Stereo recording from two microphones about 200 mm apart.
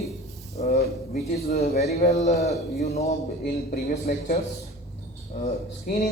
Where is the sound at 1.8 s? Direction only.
35° left (ahead or behind).